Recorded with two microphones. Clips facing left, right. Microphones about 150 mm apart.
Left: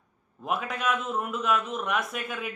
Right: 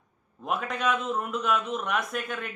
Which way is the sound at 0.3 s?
Centre (ahead or behind).